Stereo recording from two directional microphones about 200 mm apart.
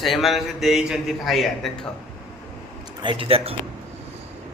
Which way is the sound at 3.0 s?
25° right (ahead or behind).